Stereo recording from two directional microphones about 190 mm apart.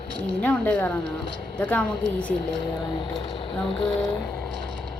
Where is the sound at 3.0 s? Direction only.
25° left (ahead or behind).